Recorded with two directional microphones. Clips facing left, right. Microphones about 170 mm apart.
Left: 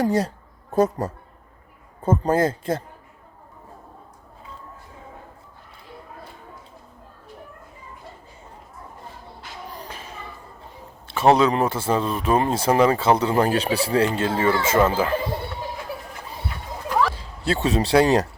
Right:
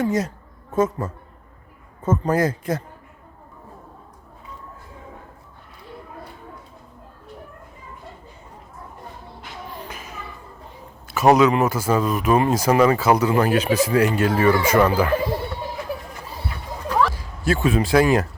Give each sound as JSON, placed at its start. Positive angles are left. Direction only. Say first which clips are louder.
{"t": 0.0, "sound": "speech", "louder": "left 1 dB", "side_deg": 30}
{"t": 9.8, "sound": "children playing", "louder": "right 1 dB", "side_deg": 30}
{"t": 11.1, "sound": "speech", "louder": "right 2 dB", "side_deg": 30}
{"t": 17.2, "sound": "speech", "louder": "right 2 dB", "side_deg": 30}